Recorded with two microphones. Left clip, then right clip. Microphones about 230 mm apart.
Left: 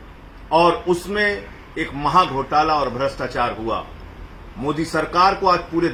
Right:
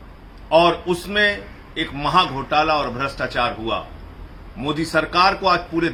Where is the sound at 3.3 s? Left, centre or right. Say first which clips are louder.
Right 1 dB; centre.